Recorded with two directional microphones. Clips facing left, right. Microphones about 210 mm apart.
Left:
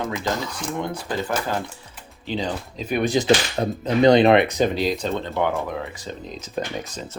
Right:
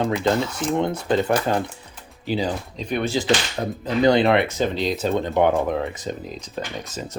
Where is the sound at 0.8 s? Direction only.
25° right (ahead or behind).